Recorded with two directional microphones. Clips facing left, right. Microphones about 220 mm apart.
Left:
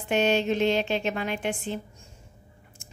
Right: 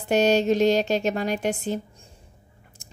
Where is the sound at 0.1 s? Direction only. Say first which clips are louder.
Right 4 dB; 40° right (ahead or behind).